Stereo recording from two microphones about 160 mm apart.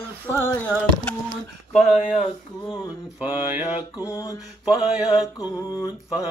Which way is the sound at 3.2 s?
10° right (ahead or behind).